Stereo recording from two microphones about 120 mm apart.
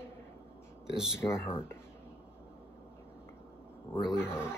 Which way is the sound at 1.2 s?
20° left (ahead or behind).